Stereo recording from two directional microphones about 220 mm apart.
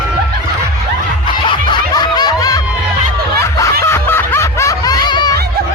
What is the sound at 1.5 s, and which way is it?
Snicker, 20° left (ahead or behind).